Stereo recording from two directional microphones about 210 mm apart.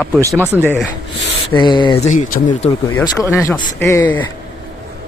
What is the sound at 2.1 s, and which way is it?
Speech, 35° left (ahead or behind).